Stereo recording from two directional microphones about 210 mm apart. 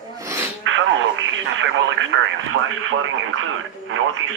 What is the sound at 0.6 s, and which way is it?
Speech, 65° right (ahead or behind).